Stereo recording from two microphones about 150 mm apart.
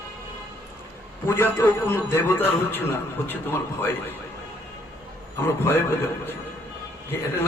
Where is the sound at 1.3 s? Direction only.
15° left (ahead or behind).